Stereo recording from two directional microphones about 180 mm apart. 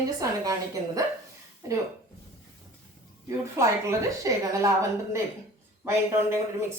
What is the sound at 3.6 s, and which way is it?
Speech, 15° right (ahead or behind).